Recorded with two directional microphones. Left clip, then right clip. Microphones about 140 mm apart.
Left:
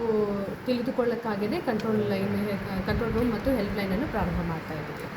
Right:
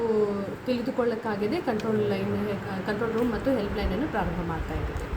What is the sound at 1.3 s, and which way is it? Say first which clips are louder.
Speech: right 1 dB; 10° right (ahead or behind).